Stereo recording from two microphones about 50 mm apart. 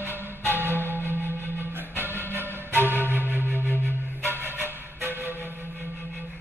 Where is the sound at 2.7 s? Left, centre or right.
Right.